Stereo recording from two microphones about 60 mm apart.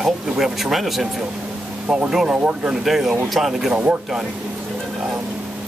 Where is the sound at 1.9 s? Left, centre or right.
Centre.